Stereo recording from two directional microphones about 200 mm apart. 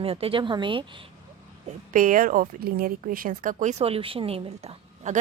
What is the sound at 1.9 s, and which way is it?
Speech, 40° right (ahead or behind).